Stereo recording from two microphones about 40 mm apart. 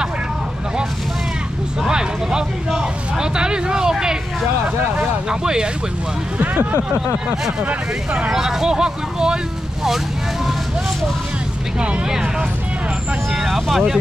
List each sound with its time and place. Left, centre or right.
1.8 s speech: centre
3.9 s a sound: centre
5.3 s speech: centre
6.4 s speech: right
7.6 s speech: right
8.3 s speech: centre
12.1 s speech: centre
13.3 s speech: centre